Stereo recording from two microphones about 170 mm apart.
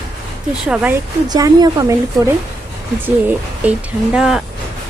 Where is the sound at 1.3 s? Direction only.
20° right (ahead or behind).